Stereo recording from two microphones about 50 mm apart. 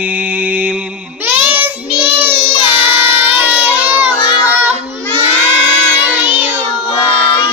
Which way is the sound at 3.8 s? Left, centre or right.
Right.